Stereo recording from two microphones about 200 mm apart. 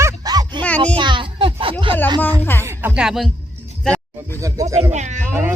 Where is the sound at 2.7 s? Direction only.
5° right (ahead or behind).